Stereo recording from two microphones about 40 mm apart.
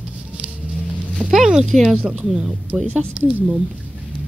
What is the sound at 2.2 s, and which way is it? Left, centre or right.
Speech, centre.